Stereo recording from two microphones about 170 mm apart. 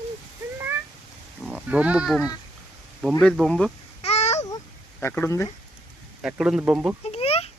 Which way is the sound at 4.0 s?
40° left (ahead or behind).